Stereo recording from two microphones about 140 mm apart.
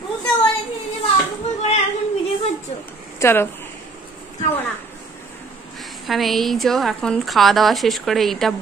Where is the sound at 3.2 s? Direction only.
15° left (ahead or behind).